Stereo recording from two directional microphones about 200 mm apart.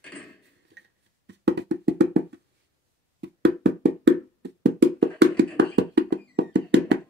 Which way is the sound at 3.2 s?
60° right (ahead or behind).